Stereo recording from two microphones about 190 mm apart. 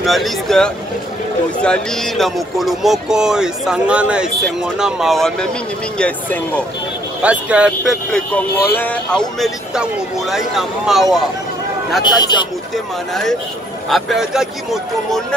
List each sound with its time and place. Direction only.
0.0 s speech: centre (ahead or behind)
7.2 s speech: 5° right (ahead or behind)
12.0 s speech: 20° left (ahead or behind)
12.7 s speech: centre (ahead or behind)